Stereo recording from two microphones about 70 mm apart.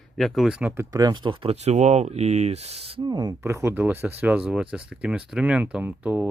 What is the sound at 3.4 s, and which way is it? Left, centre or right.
Speech, right.